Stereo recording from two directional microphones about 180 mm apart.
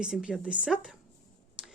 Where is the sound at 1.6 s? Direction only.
5° right (ahead or behind).